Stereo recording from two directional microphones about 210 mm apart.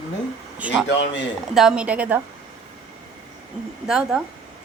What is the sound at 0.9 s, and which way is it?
Speech, 55° left (ahead or behind).